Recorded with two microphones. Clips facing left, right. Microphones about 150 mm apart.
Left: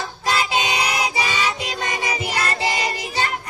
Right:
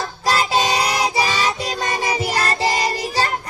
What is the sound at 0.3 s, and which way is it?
Music, 35° right (ahead or behind).